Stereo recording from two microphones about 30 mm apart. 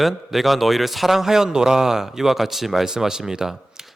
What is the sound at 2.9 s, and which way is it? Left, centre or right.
Speech, centre.